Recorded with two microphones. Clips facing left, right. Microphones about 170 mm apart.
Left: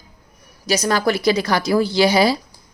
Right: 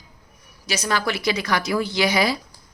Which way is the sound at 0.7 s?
40° left (ahead or behind).